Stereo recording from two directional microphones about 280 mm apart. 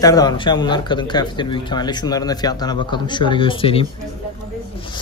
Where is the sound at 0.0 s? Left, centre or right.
Centre.